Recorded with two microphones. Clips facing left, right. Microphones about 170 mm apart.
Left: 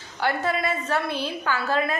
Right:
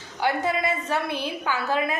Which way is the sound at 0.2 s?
15° right (ahead or behind).